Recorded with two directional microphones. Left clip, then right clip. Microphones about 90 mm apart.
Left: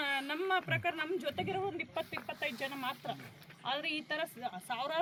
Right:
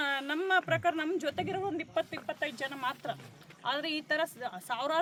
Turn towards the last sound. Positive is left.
turn(degrees=-45)  # may be behind; listen again after turning